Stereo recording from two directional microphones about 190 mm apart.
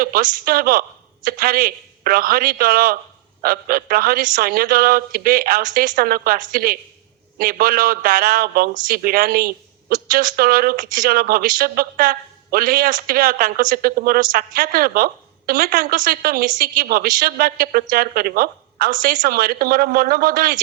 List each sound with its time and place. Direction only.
0.0 s speech: 45° right (ahead or behind)